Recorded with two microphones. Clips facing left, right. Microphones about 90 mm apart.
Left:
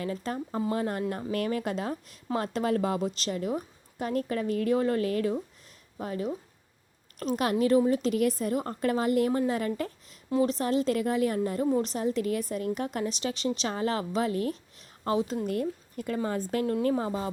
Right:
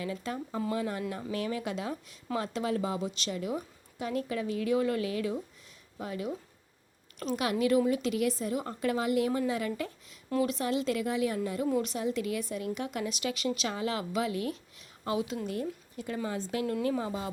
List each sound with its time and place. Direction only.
0.0 s a woman's voice: 45° left (ahead or behind)
15.4 s a woman's voice: 50° left (ahead or behind)